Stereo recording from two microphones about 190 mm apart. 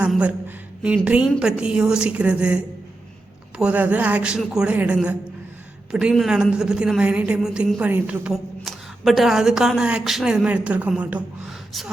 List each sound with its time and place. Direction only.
0.0 s a woman's voice: 5° right (ahead or behind)